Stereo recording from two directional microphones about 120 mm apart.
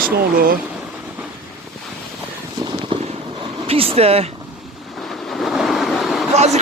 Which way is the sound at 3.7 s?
55° right (ahead or behind).